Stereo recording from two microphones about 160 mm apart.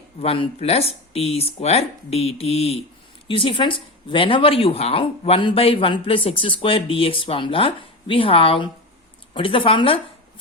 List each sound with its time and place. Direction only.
0.2 s speech: 40° left (ahead or behind)